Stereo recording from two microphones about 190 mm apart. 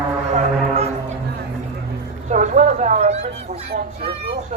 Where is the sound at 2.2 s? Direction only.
40° right (ahead or behind).